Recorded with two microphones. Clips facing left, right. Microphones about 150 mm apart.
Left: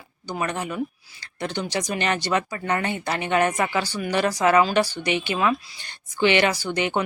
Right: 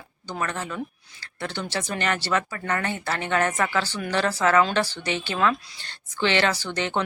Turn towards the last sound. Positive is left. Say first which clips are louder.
# left 3 dB
turn(degrees=15)  # may be behind; listen again after turning